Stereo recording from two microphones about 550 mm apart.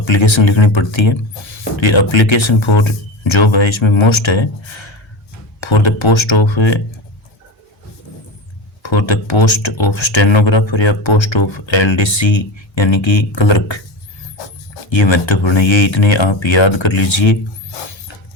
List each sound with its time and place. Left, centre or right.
0.0 s speech: left
8.8 s speech: left
14.8 s speech: left